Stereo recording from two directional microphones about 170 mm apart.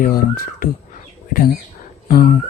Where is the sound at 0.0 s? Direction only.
55° left (ahead or behind).